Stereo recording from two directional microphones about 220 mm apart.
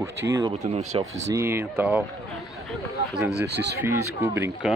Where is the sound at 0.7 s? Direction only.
30° right (ahead or behind).